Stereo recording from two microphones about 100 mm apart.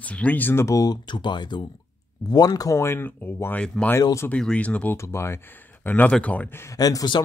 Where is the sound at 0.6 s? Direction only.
35° left (ahead or behind).